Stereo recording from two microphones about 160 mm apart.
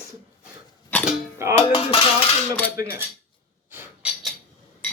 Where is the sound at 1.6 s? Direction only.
35° left (ahead or behind).